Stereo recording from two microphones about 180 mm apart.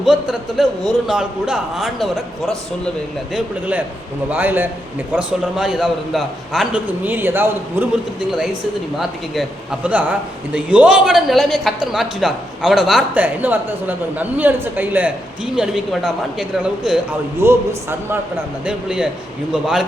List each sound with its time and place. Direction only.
0.0 s a man's voice: centre (ahead or behind)
9.0 s a man's voice: centre (ahead or behind)